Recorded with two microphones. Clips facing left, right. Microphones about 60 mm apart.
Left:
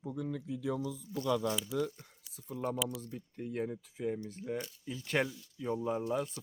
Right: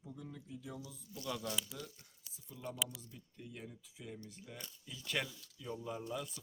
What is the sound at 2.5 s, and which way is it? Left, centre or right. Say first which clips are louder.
Speech: left 8 dB; left.